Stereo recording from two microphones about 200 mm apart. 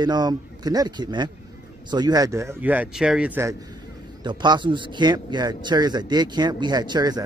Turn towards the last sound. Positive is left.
turn(degrees=-20)  # may be behind; listen again after turning